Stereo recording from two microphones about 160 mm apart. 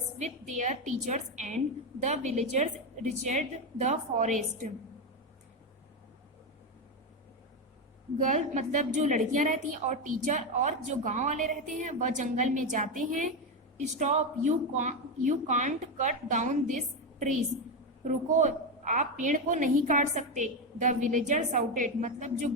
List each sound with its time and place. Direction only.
0.2 s a woman's voice: 50° right (ahead or behind)
8.2 s a woman's voice: 50° right (ahead or behind)